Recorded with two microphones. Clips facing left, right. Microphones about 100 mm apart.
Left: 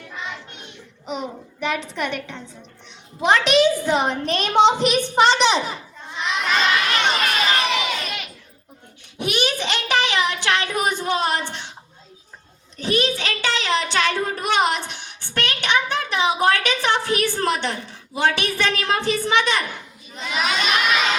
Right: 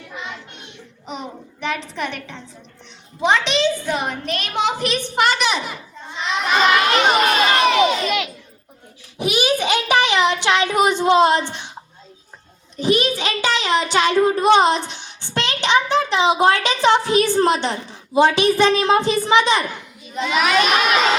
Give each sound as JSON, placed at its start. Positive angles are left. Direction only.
{"t": 0.1, "sound": "child singing", "side_deg": -5}
{"t": 3.2, "sound": "a child's voice", "side_deg": 0}
{"t": 3.9, "sound": "a woman's voice", "side_deg": 20}
{"t": 5.1, "sound": "a woman's voice", "side_deg": 30}
{"t": 6.4, "sound": "crowd", "side_deg": -15}
{"t": 7.1, "sound": "crowd", "side_deg": -25}
{"t": 8.0, "sound": "a sound", "side_deg": -90}
{"t": 9.1, "sound": "a sound", "side_deg": -5}
{"t": 12.7, "sound": "a child's voice", "side_deg": -15}
{"t": 20.1, "sound": "children shouting", "side_deg": -70}